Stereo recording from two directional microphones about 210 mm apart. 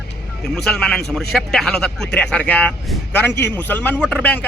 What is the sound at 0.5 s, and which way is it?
Speech, 5° left (ahead or behind).